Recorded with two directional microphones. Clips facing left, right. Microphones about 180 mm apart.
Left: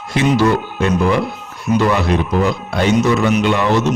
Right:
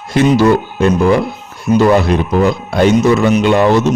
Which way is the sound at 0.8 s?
40° right (ahead or behind).